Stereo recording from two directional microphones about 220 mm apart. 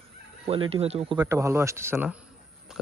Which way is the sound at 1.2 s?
10° right (ahead or behind).